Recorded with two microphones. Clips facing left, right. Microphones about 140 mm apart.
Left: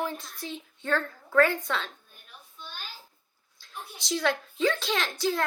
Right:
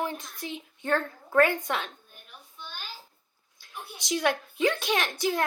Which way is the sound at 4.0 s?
15° right (ahead or behind).